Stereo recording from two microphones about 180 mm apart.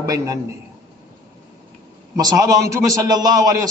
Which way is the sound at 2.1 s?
20° right (ahead or behind).